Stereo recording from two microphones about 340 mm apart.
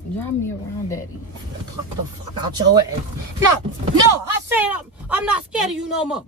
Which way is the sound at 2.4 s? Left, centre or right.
Centre.